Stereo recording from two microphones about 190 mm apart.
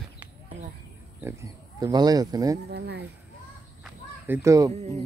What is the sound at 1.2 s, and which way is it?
Speech, 15° right (ahead or behind).